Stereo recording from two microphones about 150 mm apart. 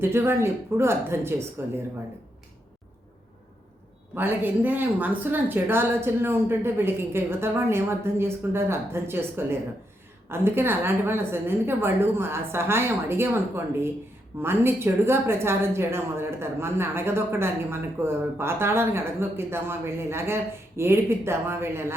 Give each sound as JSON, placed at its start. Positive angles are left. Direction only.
{"t": 0.0, "sound": "a woman's voice", "side_deg": -15}
{"t": 4.1, "sound": "a woman's voice", "side_deg": -15}